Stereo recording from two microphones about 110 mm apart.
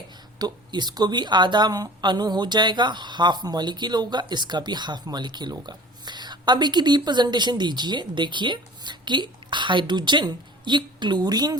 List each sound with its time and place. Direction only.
0.3 s a woman's voice: 40° right (ahead or behind)